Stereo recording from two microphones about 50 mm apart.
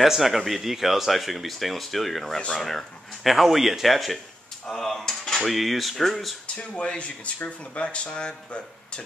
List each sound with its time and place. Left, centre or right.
0.0 s speech: centre
6.4 s speech: left